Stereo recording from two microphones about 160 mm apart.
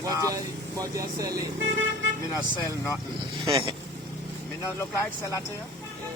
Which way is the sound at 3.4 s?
30° right (ahead or behind).